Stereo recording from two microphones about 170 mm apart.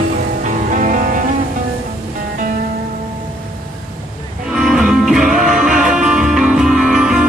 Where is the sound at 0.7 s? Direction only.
50° right (ahead or behind).